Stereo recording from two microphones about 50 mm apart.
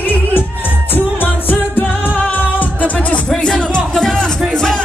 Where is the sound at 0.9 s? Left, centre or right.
Left.